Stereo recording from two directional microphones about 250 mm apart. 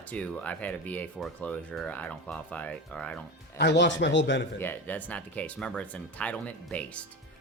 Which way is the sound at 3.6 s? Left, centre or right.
Left.